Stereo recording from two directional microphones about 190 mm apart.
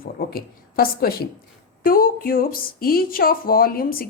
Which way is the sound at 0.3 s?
50° left (ahead or behind).